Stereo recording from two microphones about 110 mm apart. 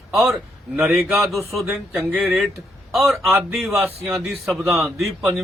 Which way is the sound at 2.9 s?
Centre (ahead or behind).